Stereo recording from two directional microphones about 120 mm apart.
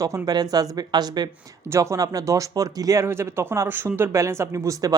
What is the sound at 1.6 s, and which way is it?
Speech, 25° right (ahead or behind).